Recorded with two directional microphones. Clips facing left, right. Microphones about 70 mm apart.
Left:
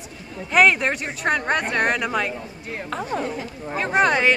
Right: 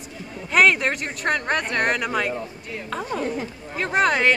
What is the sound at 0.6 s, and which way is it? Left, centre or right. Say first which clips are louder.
Speech: left 1 dB; centre.